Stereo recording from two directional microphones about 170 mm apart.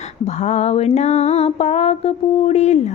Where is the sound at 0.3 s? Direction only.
40° left (ahead or behind).